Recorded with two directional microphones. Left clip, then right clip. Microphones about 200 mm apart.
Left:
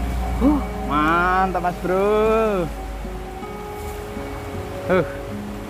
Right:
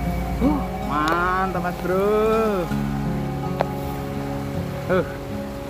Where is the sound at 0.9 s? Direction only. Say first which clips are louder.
Left 3 dB; 10° right (ahead or behind).